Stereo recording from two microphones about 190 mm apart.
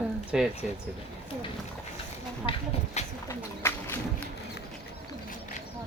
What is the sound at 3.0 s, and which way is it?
Bird, 35° left (ahead or behind).